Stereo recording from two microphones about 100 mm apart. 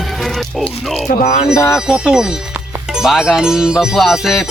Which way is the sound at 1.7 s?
10° right (ahead or behind).